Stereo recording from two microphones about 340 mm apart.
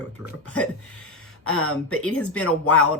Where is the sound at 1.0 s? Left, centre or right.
Left.